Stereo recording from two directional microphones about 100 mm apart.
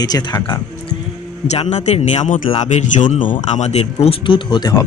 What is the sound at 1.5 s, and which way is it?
A man's voice, 90° left.